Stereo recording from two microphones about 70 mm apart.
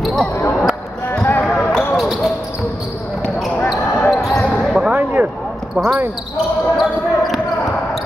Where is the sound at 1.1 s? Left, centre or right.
Left.